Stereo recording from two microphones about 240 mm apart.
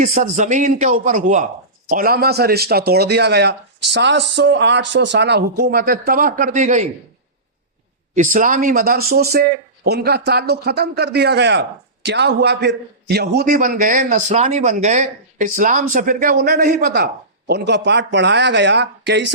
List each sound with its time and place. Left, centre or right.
0.0 s a man's voice: right
8.1 s a man's voice: right